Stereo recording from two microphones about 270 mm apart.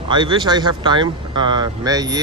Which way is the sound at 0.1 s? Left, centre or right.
Centre.